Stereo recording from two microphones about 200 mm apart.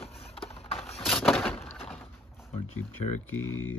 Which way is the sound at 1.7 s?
Centre (ahead or behind).